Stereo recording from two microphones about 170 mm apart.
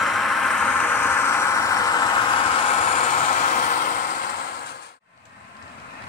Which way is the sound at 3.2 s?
45° left (ahead or behind).